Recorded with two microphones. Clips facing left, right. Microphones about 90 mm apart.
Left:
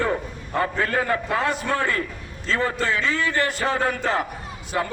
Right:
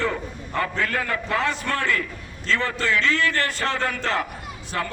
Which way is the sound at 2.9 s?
20° left (ahead or behind).